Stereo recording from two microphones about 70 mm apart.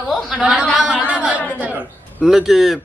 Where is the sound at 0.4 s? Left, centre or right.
Centre.